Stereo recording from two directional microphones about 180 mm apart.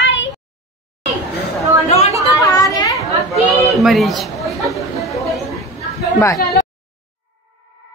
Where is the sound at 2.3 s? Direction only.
20° left (ahead or behind).